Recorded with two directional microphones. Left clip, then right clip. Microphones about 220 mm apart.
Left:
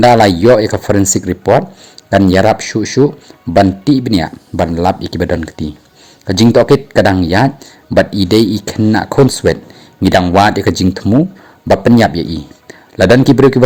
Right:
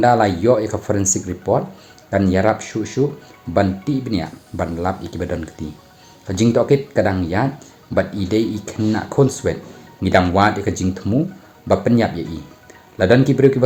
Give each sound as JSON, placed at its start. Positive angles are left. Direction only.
{"t": 0.0, "sound": "speech", "side_deg": 40}